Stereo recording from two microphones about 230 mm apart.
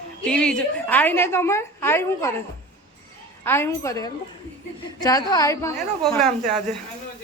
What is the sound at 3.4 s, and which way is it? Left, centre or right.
A woman's voice, centre.